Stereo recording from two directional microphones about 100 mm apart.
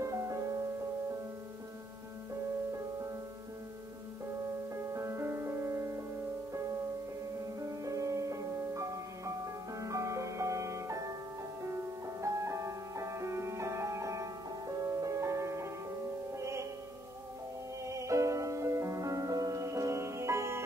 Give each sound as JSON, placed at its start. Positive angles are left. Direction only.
{"t": 0.0, "sound": "music", "side_deg": -30}
{"t": 4.7, "sound": "music", "side_deg": -30}
{"t": 7.6, "sound": "music", "side_deg": -30}
{"t": 17.8, "sound": "music", "side_deg": -30}